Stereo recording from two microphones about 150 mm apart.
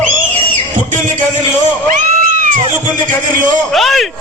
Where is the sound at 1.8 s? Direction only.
60° right (ahead or behind).